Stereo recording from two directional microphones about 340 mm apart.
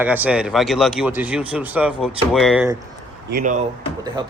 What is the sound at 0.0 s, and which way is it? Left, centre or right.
Speech, centre.